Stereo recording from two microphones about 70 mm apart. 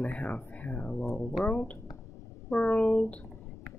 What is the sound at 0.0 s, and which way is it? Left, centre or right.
Speech, centre.